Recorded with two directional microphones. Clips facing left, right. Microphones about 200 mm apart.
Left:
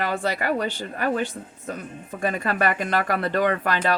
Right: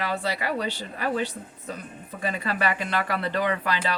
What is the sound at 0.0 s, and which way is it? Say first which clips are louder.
A woman's voice: left 3 dB; 50° left (ahead or behind).